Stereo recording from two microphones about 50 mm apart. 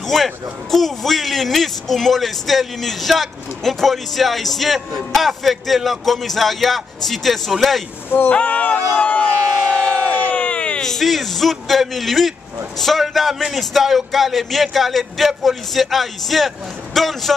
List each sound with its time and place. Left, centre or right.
0.0 s a man's voice: centre
8.3 s speech: left
9.6 s crowd: centre
10.3 s a sound: left
10.8 s a man's voice: centre